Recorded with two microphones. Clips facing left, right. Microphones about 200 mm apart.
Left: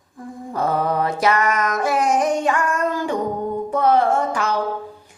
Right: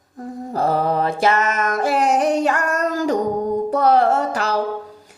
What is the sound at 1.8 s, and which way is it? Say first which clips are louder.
Music: right 2 dB; 35° right (ahead or behind).